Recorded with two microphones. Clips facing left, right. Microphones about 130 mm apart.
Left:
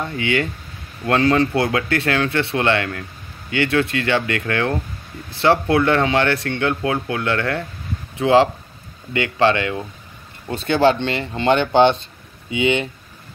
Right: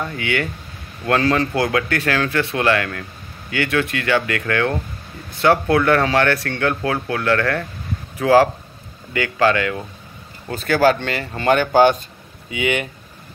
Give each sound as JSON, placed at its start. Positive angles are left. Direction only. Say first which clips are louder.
{"t": 0.0, "sound": "speech", "louder": "left 2 dB", "side_deg": 25}